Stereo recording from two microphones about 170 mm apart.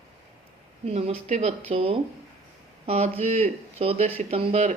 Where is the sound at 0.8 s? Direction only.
35° right (ahead or behind).